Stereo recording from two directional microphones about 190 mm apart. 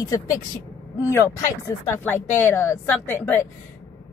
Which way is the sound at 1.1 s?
15° left (ahead or behind).